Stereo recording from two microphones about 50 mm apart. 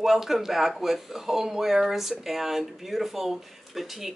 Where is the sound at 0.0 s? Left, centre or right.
Centre.